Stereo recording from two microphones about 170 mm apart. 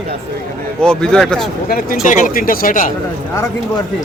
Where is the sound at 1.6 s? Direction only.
55° left (ahead or behind).